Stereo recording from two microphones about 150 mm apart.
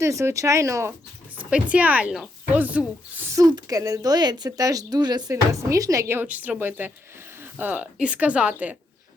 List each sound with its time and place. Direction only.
0.0 s speech: 20° right (ahead or behind)